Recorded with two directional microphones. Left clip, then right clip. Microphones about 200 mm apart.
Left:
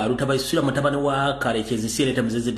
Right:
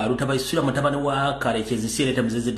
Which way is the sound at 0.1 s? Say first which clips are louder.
Left 1 dB; centre (ahead or behind).